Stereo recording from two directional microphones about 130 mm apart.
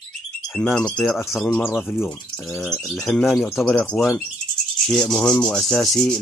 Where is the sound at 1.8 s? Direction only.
20° left (ahead or behind).